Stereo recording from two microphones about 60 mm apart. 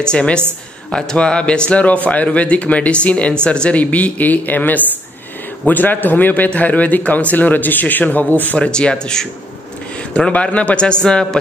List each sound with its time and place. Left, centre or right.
0.0 s a man's voice: centre
8.5 s a man's voice: centre